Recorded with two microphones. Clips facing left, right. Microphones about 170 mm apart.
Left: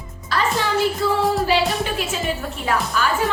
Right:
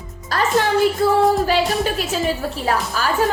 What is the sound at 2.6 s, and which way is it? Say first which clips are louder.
Music: even; 40° right (ahead or behind).